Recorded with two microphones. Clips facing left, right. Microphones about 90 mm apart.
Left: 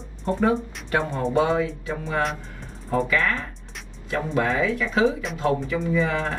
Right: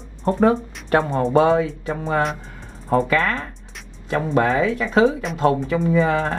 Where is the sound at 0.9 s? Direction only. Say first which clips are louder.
Right 6 dB; 35° right (ahead or behind).